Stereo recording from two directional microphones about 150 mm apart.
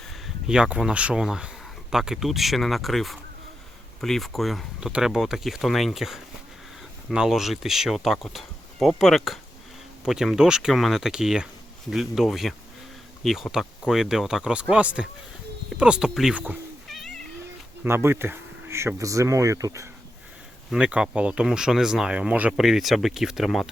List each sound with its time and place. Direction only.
0.1 s speech: 5° right (ahead or behind)
17.8 s speech: 15° right (ahead or behind)
20.7 s speech: 5° right (ahead or behind)